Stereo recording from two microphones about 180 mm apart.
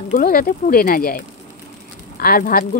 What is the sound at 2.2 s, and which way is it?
Speech, 55° left (ahead or behind).